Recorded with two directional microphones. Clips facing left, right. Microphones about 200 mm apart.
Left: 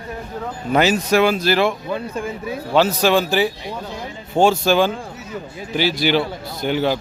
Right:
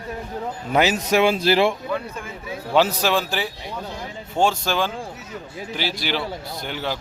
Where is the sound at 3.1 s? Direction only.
Centre (ahead or behind).